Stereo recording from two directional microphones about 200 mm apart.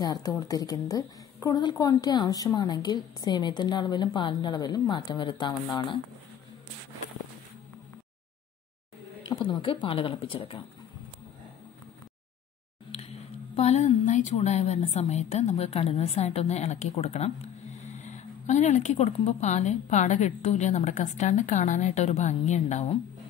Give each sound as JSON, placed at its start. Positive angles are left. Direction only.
{"t": 0.0, "sound": "a woman's voice", "side_deg": 20}
{"t": 9.2, "sound": "a woman's voice", "side_deg": 25}
{"t": 13.6, "sound": "a woman's voice", "side_deg": 35}